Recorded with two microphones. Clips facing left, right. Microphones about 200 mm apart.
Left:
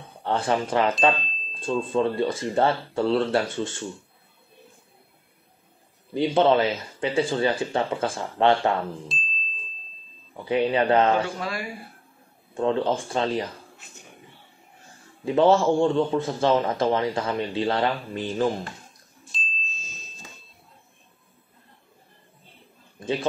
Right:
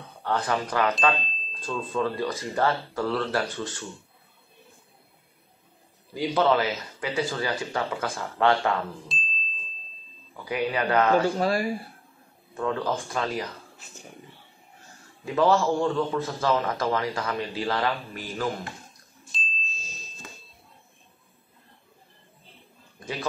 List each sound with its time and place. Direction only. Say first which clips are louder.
0.2 s a man's voice: left 3 dB; 25° left (ahead or behind)
1.1 s chime: right 1 dB; centre (ahead or behind)
1.6 s a man's voice: left 5 dB; 30° left (ahead or behind)
6.1 s a man's voice: left 3 dB; 25° left (ahead or behind)
9.1 s music: even; centre (ahead or behind)
10.3 s a man's voice: left 5 dB; 25° left (ahead or behind)
11.2 s speech: right 7 dB; 35° right (ahead or behind)
12.5 s a man's voice: left 4 dB; 25° left (ahead or behind)
15.2 s a man's voice: left 3 dB; 25° left (ahead or behind)
19.3 s ding: even; centre (ahead or behind)